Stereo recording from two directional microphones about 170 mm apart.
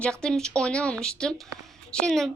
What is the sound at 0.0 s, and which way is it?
A woman's voice, 5° left (ahead or behind).